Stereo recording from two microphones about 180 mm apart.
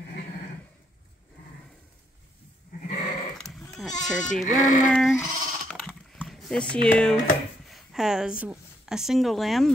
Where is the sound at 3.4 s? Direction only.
Centre (ahead or behind).